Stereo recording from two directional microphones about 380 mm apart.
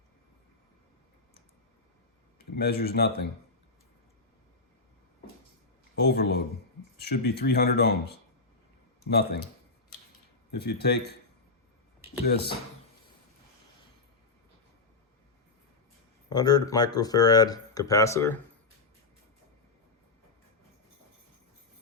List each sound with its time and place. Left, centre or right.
2.6 s speech: left
6.0 s speech: left
10.5 s speech: left
12.2 s speech: left
16.3 s speech: centre